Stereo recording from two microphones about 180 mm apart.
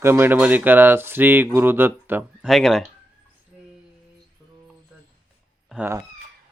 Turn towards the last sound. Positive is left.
turn(degrees=-5)  # may be behind; listen again after turning